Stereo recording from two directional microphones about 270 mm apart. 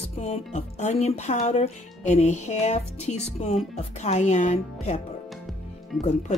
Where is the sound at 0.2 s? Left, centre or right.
Left.